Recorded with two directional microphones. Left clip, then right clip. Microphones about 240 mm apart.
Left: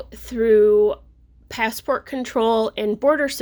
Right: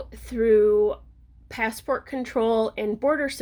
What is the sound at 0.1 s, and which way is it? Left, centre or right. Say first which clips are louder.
Speech: left 3 dB; centre.